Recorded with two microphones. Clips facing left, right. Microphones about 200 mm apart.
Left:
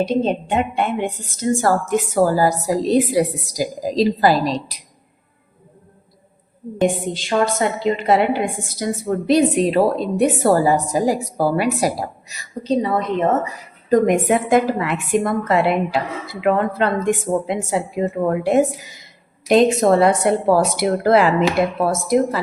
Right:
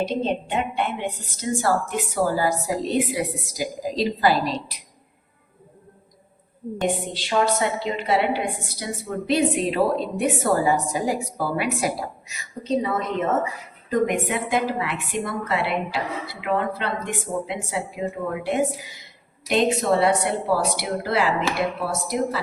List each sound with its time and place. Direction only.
0.0 s a woman's voice: 50° left (ahead or behind)
6.8 s a woman's voice: 45° left (ahead or behind)
14.3 s a woman's voice: 45° left (ahead or behind)